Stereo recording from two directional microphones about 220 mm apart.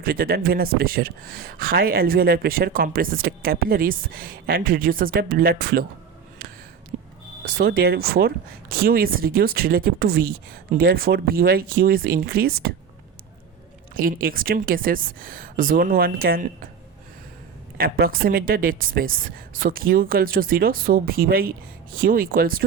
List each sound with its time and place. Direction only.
0.0 s speech: 40° right (ahead or behind)
6.9 s a sound: 40° right (ahead or behind)
7.6 s speech: 45° right (ahead or behind)
13.9 s speech: 40° right (ahead or behind)
17.7 s speech: 40° right (ahead or behind)